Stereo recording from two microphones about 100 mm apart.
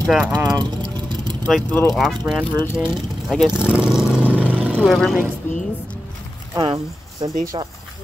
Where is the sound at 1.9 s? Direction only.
Centre (ahead or behind).